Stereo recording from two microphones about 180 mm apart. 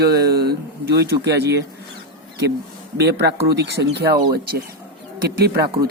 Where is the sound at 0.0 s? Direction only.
60° right (ahead or behind).